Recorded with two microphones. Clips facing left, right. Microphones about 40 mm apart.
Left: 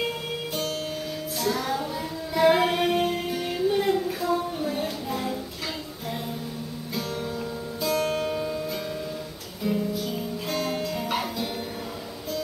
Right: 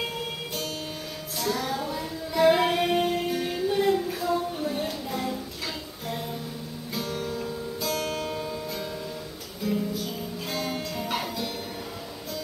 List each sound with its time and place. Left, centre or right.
1.4 s child singing: centre
7.3 s music: centre
9.8 s music: centre